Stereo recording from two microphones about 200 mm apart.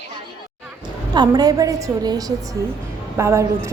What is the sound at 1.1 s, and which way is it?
A woman's voice, 20° right (ahead or behind).